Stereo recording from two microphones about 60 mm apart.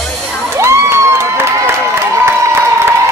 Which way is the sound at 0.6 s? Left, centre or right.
Right.